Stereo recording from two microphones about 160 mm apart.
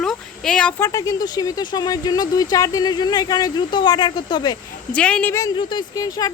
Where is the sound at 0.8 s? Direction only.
20° left (ahead or behind).